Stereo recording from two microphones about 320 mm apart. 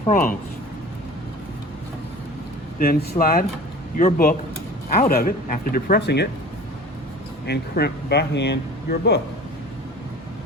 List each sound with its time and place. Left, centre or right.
0.0 s speech: left
2.7 s speech: left
7.4 s speech: left